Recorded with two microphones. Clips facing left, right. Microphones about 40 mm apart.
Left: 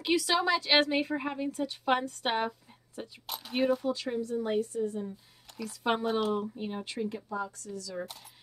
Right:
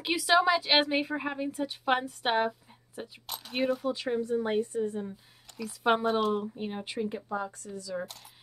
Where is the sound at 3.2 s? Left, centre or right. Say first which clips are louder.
Left 1 dB; centre.